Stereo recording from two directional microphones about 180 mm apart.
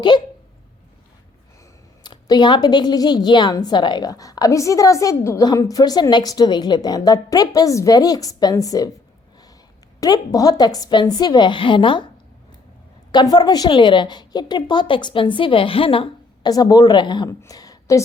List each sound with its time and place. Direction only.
0.1 s a woman's voice: 25° left (ahead or behind)
2.0 s a woman's voice: 25° left (ahead or behind)
10.0 s a woman's voice: 20° left (ahead or behind)
13.1 s a woman's voice: 25° left (ahead or behind)